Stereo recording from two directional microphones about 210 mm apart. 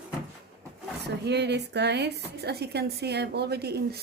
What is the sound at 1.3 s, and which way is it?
A woman's voice, 55° right (ahead or behind).